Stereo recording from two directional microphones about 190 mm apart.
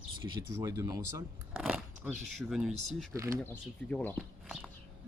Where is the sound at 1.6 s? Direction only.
Centre (ahead or behind).